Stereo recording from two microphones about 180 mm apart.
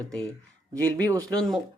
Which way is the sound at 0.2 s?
20° right (ahead or behind).